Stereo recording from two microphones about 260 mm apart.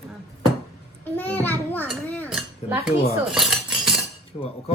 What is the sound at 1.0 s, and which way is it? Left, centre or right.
A child's voice, centre.